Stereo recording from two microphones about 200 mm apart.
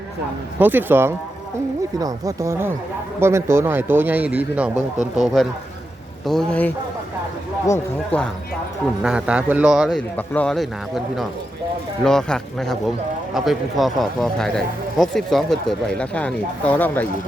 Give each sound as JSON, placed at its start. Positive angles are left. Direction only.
{"t": 0.6, "sound": "speech", "side_deg": -10}
{"t": 9.0, "sound": "speech", "side_deg": -5}